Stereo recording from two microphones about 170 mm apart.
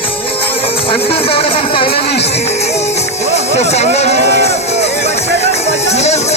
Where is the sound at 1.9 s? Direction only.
80° left.